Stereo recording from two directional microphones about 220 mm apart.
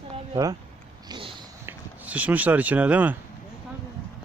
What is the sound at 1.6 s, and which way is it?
Speech, 10° right (ahead or behind).